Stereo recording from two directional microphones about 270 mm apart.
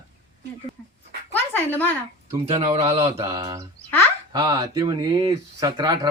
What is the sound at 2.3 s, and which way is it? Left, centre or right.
Speech, centre.